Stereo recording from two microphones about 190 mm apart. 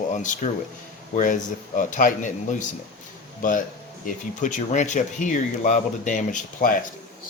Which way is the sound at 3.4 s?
45° left (ahead or behind).